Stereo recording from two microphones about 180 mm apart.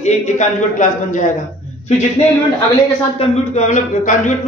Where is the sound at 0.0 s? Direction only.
40° left (ahead or behind).